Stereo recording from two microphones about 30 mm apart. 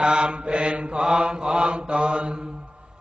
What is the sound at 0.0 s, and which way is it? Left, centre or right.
Mantra, right.